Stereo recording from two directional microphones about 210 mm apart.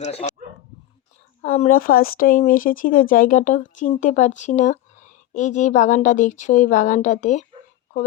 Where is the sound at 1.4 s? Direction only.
35° left (ahead or behind).